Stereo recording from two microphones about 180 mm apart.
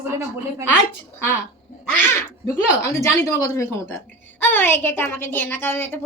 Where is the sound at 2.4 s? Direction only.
15° left (ahead or behind).